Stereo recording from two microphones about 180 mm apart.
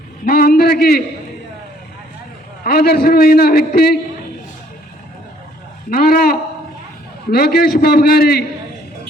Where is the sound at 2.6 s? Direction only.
55° left (ahead or behind).